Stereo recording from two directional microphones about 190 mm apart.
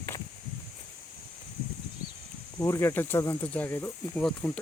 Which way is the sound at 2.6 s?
15° left (ahead or behind).